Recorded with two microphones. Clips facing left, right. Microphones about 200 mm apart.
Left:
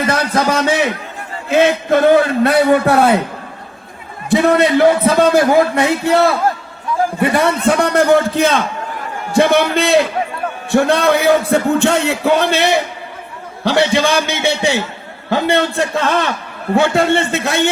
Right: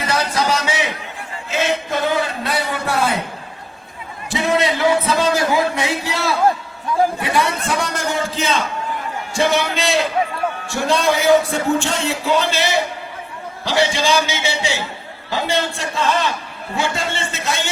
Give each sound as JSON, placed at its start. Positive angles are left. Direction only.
{"t": 0.0, "sound": "a sound", "side_deg": 55}
{"t": 1.5, "sound": "a man's voice", "side_deg": 60}
{"t": 4.3, "sound": "a man's voice", "side_deg": 55}